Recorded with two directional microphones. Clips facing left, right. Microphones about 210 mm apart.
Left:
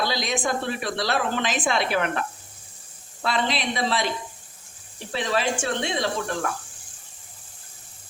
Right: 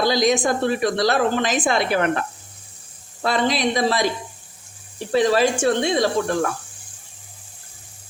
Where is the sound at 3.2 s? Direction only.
45° right (ahead or behind).